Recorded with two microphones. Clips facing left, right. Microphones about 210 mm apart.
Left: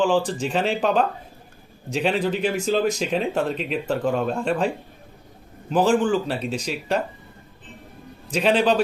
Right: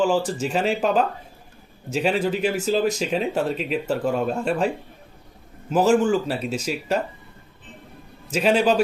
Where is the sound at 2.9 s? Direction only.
40° right (ahead or behind).